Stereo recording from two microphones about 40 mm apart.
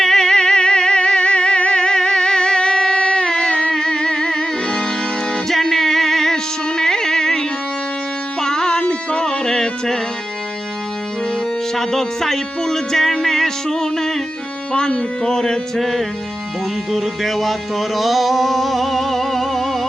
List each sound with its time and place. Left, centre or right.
0.0 s music: centre
11.7 s a sound: centre
13.2 s music: centre
15.8 s music: centre